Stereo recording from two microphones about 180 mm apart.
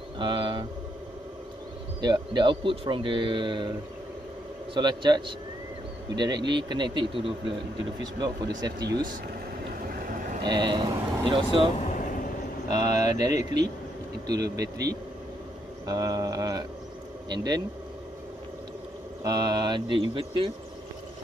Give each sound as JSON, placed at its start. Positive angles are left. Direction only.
{"t": 0.2, "sound": "speech", "side_deg": -25}
{"t": 2.0, "sound": "speech", "side_deg": -25}
{"t": 4.7, "sound": "speech", "side_deg": -25}
{"t": 9.8, "sound": "vehicle", "side_deg": -55}
{"t": 10.4, "sound": "speech", "side_deg": -25}
{"t": 11.8, "sound": "vehicle", "side_deg": 45}
{"t": 12.6, "sound": "speech", "side_deg": -20}
{"t": 15.9, "sound": "speech", "side_deg": -20}
{"t": 19.2, "sound": "speech", "side_deg": -20}